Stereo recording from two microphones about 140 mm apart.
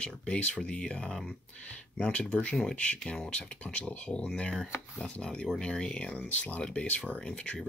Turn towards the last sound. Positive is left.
turn(degrees=5)  # may be behind; listen again after turning